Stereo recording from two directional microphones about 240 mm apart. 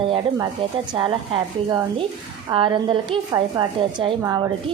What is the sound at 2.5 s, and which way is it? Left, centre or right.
A woman's voice, centre.